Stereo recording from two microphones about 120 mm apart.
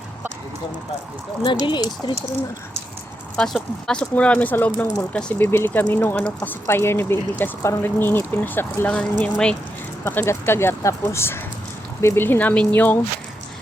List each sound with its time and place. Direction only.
1.5 s speech: 40° left (ahead or behind)
3.3 s speech: 5° left (ahead or behind)